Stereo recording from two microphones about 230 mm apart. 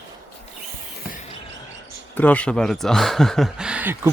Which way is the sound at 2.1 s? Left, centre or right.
Centre.